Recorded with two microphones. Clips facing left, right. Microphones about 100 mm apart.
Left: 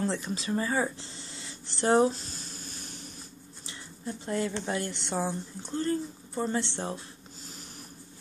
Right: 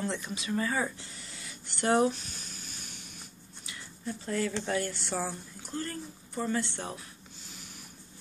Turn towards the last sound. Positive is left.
turn(degrees=30)  # may be behind; listen again after turning